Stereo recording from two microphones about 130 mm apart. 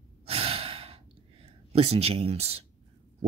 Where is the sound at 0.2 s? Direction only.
50° right (ahead or behind).